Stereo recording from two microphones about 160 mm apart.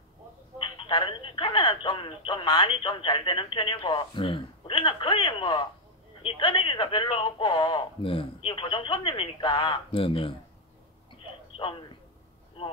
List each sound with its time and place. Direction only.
0.6 s speech: 35° left (ahead or behind)
12.6 s speech: 35° left (ahead or behind)